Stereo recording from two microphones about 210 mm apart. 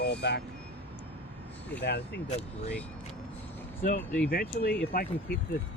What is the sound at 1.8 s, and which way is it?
Speech, 50° left (ahead or behind).